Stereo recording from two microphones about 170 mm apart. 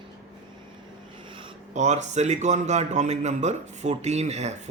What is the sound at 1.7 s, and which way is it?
A man's voice, 45° right (ahead or behind).